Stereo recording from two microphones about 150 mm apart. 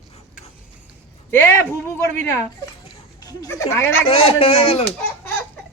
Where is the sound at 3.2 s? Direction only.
20° left (ahead or behind).